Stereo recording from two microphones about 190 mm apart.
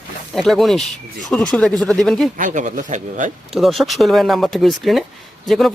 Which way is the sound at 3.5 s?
Centre (ahead or behind).